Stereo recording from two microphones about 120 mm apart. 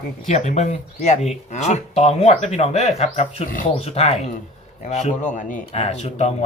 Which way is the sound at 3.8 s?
60° left (ahead or behind).